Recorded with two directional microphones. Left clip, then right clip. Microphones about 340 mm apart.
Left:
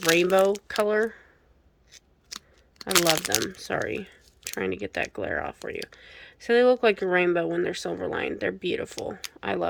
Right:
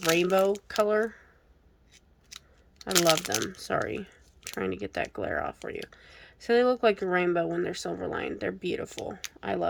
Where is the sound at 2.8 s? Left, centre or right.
Centre.